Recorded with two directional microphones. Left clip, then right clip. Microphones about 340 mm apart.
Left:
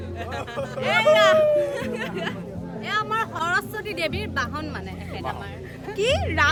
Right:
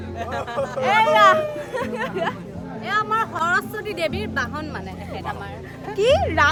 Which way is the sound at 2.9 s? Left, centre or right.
Centre.